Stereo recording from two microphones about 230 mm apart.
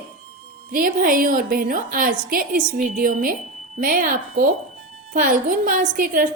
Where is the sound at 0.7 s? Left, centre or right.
Right.